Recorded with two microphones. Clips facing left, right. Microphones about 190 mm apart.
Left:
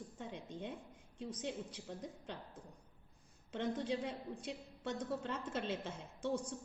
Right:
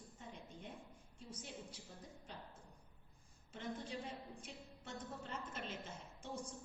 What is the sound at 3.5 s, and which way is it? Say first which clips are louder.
A woman's voice: left 8 dB; 85° left.